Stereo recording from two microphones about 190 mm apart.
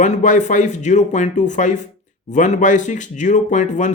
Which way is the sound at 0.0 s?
40° left (ahead or behind).